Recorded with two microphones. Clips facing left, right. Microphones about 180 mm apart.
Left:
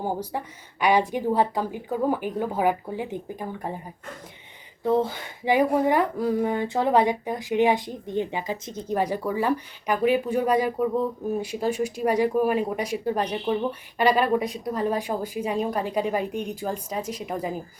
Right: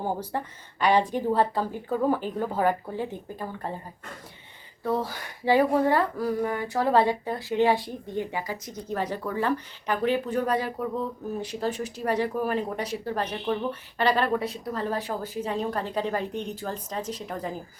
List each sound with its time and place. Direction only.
0.0 s speech: 10° left (ahead or behind)
4.8 s speech: 20° left (ahead or behind)
9.0 s speech: 10° left (ahead or behind)